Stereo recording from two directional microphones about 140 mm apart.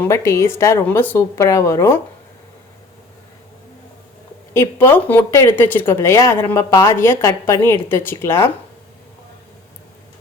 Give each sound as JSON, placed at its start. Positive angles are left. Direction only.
{"t": 0.0, "sound": "a woman's voice", "side_deg": 20}
{"t": 4.5, "sound": "speech", "side_deg": 15}